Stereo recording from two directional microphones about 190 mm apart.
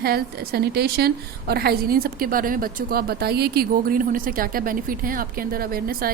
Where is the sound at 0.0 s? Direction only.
55° right (ahead or behind).